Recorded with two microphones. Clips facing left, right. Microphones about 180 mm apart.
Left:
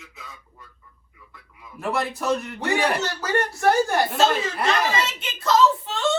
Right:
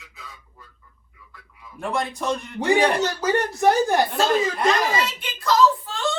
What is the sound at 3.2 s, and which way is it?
Speech, 15° right (ahead or behind).